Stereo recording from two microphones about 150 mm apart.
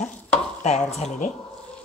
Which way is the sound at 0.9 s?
50° left (ahead or behind).